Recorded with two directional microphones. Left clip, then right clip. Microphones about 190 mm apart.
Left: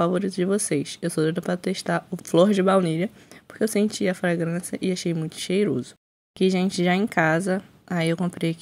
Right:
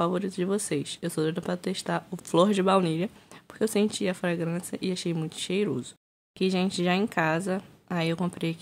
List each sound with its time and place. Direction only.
0.0 s speech: 15° left (ahead or behind)